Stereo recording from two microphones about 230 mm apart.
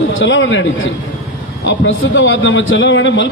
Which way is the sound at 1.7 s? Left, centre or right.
Left.